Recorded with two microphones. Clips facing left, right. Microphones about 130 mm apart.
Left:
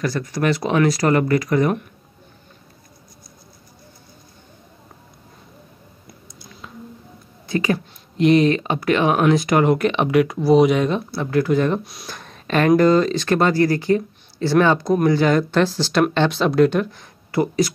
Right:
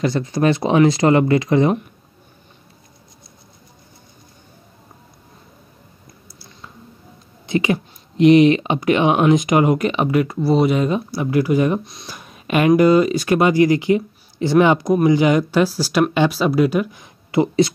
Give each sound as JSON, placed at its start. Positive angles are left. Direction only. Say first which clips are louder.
{"t": 0.0, "sound": "speech", "louder": "right 4 dB", "side_deg": -25}
{"t": 6.0, "sound": "a sound", "louder": "left 3 dB", "side_deg": -5}
{"t": 7.4, "sound": "speech", "louder": "right 2 dB", "side_deg": -20}
{"t": 11.8, "sound": "speech", "louder": "left 1 dB", "side_deg": 0}
{"t": 12.1, "sound": "speech", "louder": "right 1 dB", "side_deg": -10}
{"t": 17.0, "sound": "speech", "louder": "right 3 dB", "side_deg": -20}